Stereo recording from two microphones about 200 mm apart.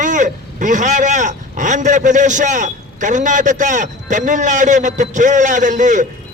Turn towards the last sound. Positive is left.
turn(degrees=-40)  # may be behind; listen again after turning